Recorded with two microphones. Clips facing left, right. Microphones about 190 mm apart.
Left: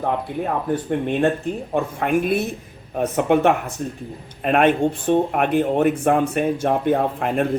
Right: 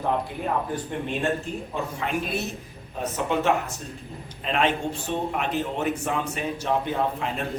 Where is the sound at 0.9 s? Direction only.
55° left (ahead or behind).